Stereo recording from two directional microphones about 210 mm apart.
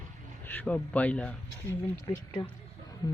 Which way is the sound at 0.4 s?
10° left (ahead or behind).